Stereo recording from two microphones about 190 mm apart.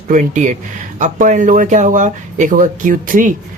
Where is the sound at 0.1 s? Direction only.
40° right (ahead or behind).